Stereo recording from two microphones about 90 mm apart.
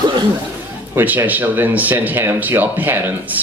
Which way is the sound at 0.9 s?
25° right (ahead or behind).